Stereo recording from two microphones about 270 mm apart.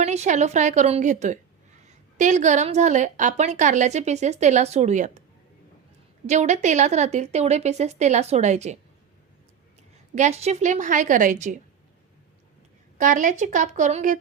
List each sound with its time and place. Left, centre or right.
0.0 s a woman's voice: right
6.2 s a woman's voice: right
10.2 s a woman's voice: right
13.0 s a woman's voice: right